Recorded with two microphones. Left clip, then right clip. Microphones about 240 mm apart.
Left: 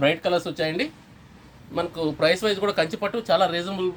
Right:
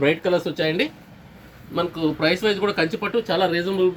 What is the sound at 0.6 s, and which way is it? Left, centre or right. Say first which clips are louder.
Speech: right 4 dB; left.